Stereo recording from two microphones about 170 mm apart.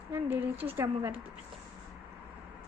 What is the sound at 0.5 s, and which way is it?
Speech, 35° right (ahead or behind).